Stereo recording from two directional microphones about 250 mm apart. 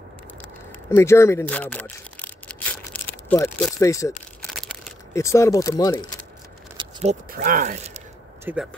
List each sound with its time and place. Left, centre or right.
0.7 s a sound: centre
3.3 s speech: centre
5.1 s speech: centre
6.8 s speech: right
8.5 s speech: centre